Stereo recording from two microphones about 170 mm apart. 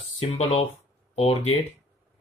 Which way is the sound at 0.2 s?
35° left (ahead or behind).